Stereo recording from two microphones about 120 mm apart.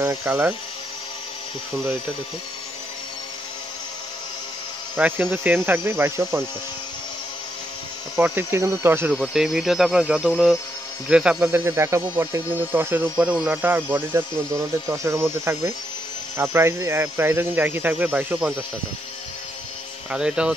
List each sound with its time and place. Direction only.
0.0 s speech: 25° right (ahead or behind)
4.9 s speech: 15° right (ahead or behind)
8.2 s speech: 20° right (ahead or behind)
9.1 s speech: 5° right (ahead or behind)
11.5 s speech: 20° right (ahead or behind)
20.1 s speech: 5° right (ahead or behind)